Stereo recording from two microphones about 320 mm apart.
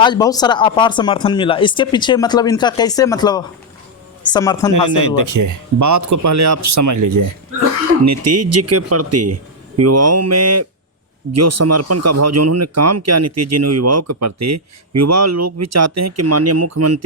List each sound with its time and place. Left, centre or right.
0.0 s speech: centre
4.7 s speech: right
8.0 s speech: right